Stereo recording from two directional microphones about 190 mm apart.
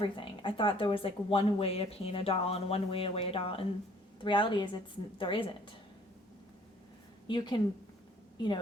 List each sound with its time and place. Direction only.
0.0 s speech: 25° left (ahead or behind)
7.3 s speech: 25° left (ahead or behind)